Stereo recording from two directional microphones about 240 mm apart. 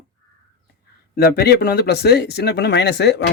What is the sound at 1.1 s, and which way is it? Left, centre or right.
Speech, left.